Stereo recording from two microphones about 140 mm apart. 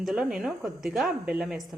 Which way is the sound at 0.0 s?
5° right (ahead or behind).